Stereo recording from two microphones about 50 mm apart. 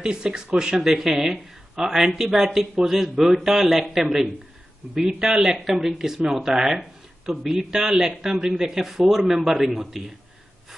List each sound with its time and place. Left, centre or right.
0.0 s speech: centre
5.7 s a man's voice: centre